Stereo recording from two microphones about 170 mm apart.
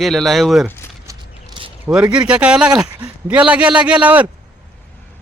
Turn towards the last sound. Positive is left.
turn(degrees=-10)  # may be behind; listen again after turning